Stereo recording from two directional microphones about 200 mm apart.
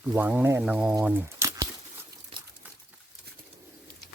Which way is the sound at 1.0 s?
10° right (ahead or behind).